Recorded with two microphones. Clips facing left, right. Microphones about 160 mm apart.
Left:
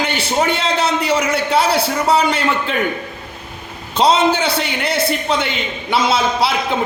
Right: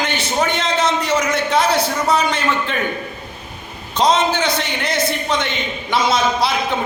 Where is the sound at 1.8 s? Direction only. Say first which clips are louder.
Left 2 dB; 30° left (ahead or behind).